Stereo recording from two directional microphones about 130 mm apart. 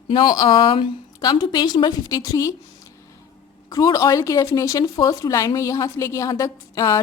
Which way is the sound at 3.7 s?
25° left (ahead or behind).